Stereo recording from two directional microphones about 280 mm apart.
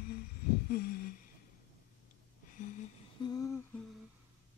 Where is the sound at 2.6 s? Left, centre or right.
Left.